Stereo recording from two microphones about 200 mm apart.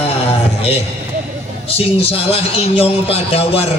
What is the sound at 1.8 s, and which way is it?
A man's voice, 30° left (ahead or behind).